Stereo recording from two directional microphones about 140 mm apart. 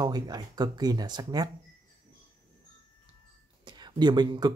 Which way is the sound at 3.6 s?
30° right (ahead or behind).